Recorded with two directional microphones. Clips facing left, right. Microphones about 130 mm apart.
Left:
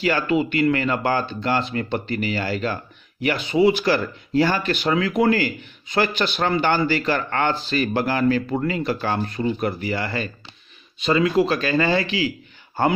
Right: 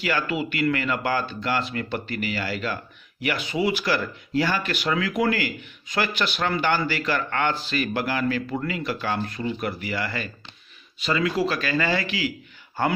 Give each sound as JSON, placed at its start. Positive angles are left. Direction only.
{"t": 0.0, "sound": "speech", "side_deg": 30}